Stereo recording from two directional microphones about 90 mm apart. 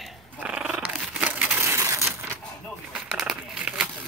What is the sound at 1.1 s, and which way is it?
Crushing, 15° right (ahead or behind).